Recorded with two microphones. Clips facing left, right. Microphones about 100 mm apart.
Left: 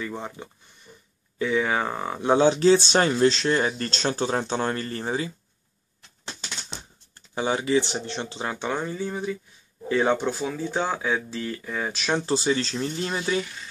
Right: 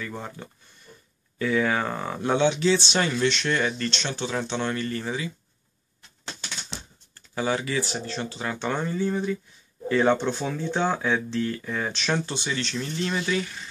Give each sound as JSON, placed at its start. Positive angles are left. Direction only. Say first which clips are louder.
{"t": 0.0, "sound": "speech", "louder": "left 2 dB", "side_deg": 15}
{"t": 2.3, "sound": "speech", "louder": "left 4 dB", "side_deg": 35}
{"t": 7.2, "sound": "speech", "louder": "left 1 dB", "side_deg": 25}
{"t": 8.6, "sound": "speech", "louder": "right 3 dB", "side_deg": 10}
{"t": 12.3, "sound": "speech", "louder": "left 6 dB", "side_deg": 35}